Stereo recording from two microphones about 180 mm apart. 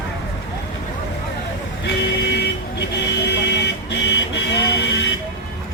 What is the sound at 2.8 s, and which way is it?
Vehicle, 70° left (ahead or behind).